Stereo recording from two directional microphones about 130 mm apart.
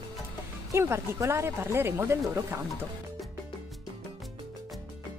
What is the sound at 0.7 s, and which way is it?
Speech, 20° right (ahead or behind).